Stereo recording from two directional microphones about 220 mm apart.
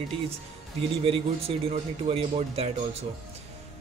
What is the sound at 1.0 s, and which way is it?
Music, 25° right (ahead or behind).